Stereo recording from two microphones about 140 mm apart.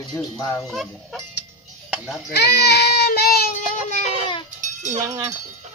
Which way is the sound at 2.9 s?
90° left.